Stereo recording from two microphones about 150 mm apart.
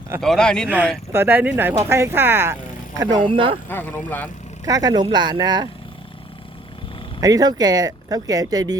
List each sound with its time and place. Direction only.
0.2 s a man's voice: 5° left (ahead or behind)
1.1 s a woman's voice: 15° right (ahead or behind)
3.0 s speech: 30° right (ahead or behind)
3.7 s speech: 10° left (ahead or behind)
4.6 s speech: 25° right (ahead or behind)
7.2 s speech: 25° right (ahead or behind)